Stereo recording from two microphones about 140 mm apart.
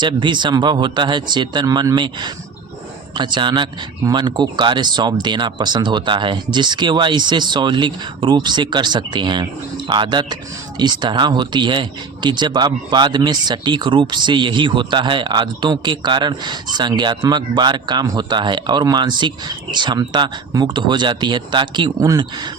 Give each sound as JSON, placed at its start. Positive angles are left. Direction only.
{"t": 0.0, "sound": "speech", "side_deg": -35}